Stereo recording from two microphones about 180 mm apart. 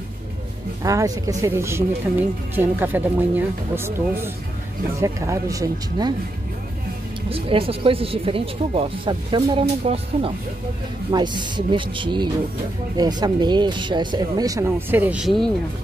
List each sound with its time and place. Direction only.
0.8 s speech: 20° right (ahead or behind)
7.2 s speech: 30° right (ahead or behind); by 15.5 s centre (ahead or behind)